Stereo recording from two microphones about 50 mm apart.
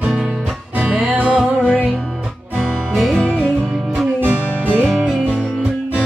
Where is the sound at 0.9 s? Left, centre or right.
Centre.